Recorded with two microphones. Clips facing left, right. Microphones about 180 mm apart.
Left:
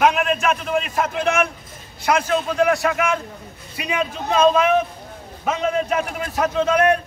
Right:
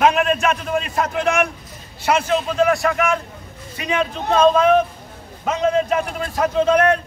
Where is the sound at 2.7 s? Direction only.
Centre (ahead or behind).